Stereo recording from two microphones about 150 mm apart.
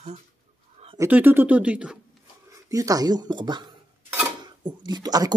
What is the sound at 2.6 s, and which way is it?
Speech, 25° right (ahead or behind).